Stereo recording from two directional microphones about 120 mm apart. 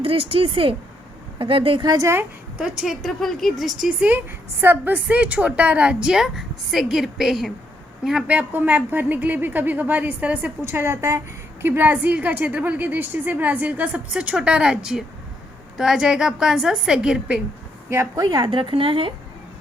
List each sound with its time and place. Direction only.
0.0 s speech: 50° right (ahead or behind)
2.0 s a woman's voice: 25° right (ahead or behind)
2.6 s a woman's voice: 5° right (ahead or behind)
17.8 s speech: 20° right (ahead or behind)
18.2 s speech: 35° right (ahead or behind)